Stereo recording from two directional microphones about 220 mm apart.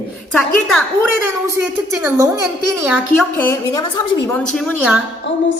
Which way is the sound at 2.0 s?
10° right (ahead or behind).